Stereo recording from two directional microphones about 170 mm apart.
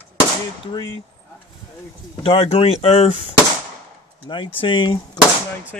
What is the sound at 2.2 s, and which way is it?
Speech, 35° left (ahead or behind).